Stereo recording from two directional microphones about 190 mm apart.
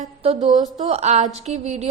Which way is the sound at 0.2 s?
25° right (ahead or behind).